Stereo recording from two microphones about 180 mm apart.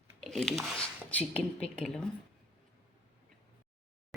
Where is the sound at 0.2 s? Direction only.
5° left (ahead or behind).